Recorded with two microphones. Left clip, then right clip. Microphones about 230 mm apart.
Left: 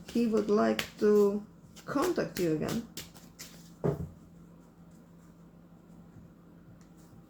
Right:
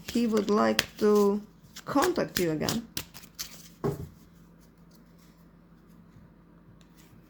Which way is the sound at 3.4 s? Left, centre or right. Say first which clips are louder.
Right 9 dB; right.